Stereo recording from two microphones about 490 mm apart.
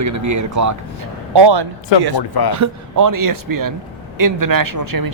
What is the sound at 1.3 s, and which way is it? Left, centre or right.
Speech, right.